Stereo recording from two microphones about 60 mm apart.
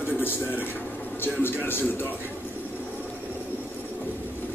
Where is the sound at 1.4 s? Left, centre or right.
Left.